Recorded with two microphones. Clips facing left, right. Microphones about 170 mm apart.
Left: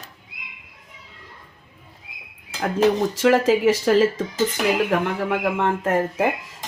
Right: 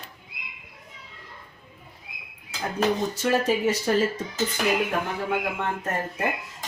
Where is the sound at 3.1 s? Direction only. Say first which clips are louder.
Left 6 dB; 90° left.